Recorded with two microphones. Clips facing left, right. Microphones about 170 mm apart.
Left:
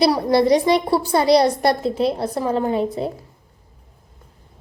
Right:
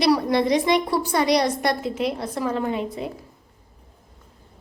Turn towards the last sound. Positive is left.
turn(degrees=35)  # may be behind; listen again after turning